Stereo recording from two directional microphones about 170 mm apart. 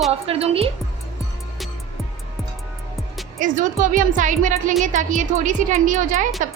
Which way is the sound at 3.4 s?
50° right (ahead or behind).